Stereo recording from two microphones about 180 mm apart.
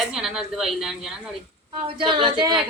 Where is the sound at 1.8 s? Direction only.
30° right (ahead or behind).